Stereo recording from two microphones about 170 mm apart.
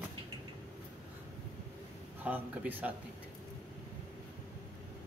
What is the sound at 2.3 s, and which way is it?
Speech, 10° right (ahead or behind).